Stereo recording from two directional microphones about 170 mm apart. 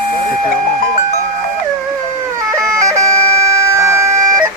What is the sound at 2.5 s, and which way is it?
Bagpipes, 20° right (ahead or behind).